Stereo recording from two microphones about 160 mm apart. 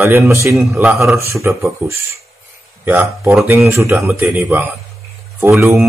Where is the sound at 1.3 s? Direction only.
15° right (ahead or behind).